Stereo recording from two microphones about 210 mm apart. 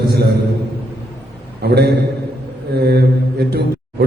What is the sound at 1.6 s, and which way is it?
A man's voice, 50° right (ahead or behind).